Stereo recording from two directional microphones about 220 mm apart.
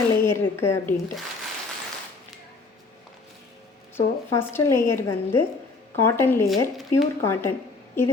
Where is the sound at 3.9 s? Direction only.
10° left (ahead or behind).